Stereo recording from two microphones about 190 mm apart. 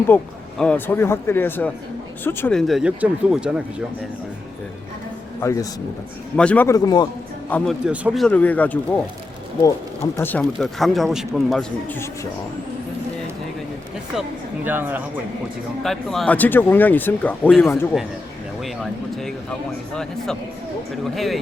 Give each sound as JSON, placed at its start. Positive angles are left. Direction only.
{"t": 0.1, "sound": "a man's voice", "side_deg": 10}
{"t": 5.4, "sound": "speech", "side_deg": 15}
{"t": 7.5, "sound": "speech", "side_deg": 0}
{"t": 10.2, "sound": "a man's voice", "side_deg": 10}
{"t": 14.2, "sound": "speech", "side_deg": -10}
{"t": 15.8, "sound": "a man's voice", "side_deg": 0}
{"t": 21.0, "sound": "a man's voice", "side_deg": 0}